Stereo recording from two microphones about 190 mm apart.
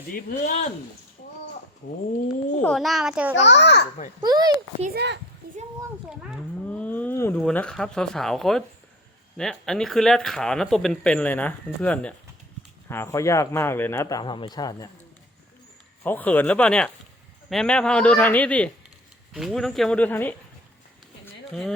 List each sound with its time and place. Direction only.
0.1 s speech: 45° left (ahead or behind)
2.6 s speech: 5° left (ahead or behind)
3.3 s a child's voice: 70° left (ahead or behind)
4.2 s a child's voice: 20° right (ahead or behind)
4.9 s a child's voice: 65° right (ahead or behind)
6.1 s speech: centre (ahead or behind); by 14.8 s 20° left (ahead or behind)
16.0 s speech: 10° left (ahead or behind)
21.5 s speech: centre (ahead or behind)